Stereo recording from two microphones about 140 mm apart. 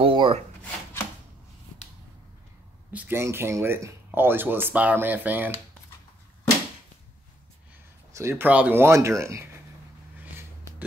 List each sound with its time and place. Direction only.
0.0 s speech: 40° right (ahead or behind)
2.9 s speech: 15° right (ahead or behind)
8.1 s speech: 20° right (ahead or behind)